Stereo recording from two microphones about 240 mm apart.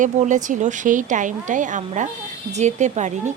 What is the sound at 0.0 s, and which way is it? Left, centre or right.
Speech, right.